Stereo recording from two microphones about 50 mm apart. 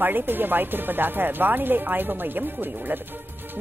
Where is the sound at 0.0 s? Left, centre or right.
Right.